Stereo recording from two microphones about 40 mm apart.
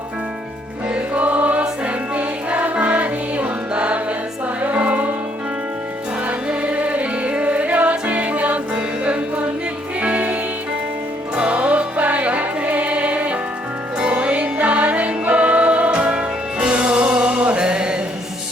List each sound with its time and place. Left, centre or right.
0.9 s music: right
6.5 s music: right
11.3 s music: right